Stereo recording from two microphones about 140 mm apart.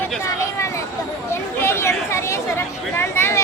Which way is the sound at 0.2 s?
20° left (ahead or behind).